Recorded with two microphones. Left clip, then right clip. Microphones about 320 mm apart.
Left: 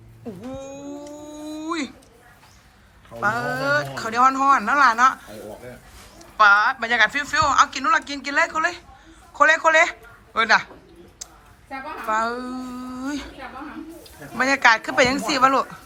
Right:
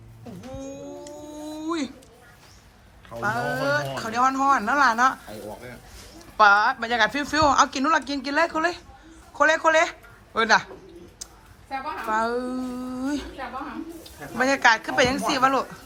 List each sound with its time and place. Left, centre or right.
0.5 s a sound: centre
3.2 s speech: centre
6.3 s a woman's voice: centre
11.7 s speech: centre